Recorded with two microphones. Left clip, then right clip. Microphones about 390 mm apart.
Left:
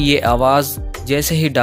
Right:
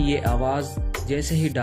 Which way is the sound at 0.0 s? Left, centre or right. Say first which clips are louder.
Left 10 dB; left.